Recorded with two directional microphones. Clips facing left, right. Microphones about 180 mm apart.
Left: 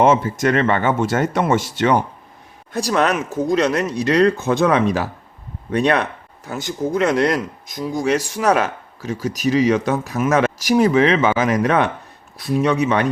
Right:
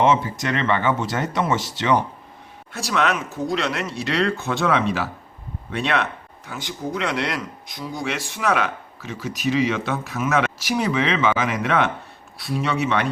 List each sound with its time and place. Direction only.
0.0 s speech: 45° left (ahead or behind)
2.7 s speech: 40° left (ahead or behind)